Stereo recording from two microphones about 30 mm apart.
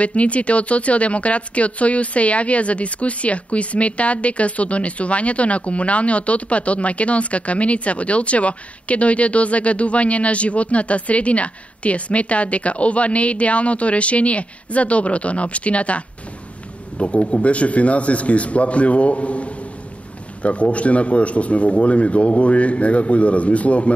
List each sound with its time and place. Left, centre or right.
0.0 s speech: left
17.0 s speech: left